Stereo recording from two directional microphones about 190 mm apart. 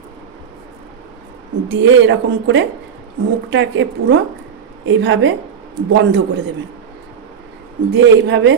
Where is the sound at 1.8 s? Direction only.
75° right (ahead or behind).